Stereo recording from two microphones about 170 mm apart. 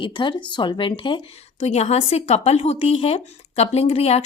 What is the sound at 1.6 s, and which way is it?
A woman's voice, 40° left (ahead or behind).